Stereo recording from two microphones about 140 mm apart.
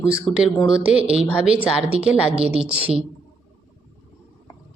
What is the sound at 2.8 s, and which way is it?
Speech, 40° right (ahead or behind).